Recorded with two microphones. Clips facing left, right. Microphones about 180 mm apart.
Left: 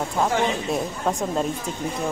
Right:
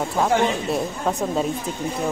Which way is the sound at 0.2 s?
Centre (ahead or behind).